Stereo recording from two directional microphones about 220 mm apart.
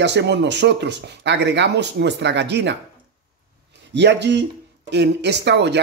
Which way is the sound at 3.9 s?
50° right (ahead or behind).